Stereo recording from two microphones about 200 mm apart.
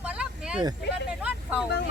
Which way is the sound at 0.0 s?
5° right (ahead or behind).